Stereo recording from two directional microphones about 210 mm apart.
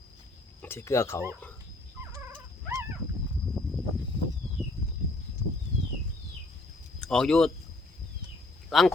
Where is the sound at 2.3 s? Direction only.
15° right (ahead or behind).